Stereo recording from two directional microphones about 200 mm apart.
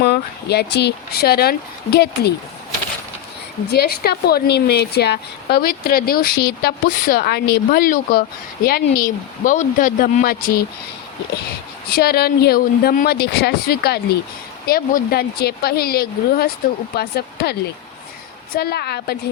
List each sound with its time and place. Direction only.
0.0 s a woman's voice: 55° left (ahead or behind)
3.7 s a woman's voice: 50° left (ahead or behind)
11.9 s a woman's voice: 50° left (ahead or behind)